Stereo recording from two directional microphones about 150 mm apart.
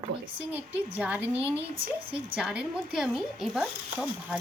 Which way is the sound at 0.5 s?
10° right (ahead or behind).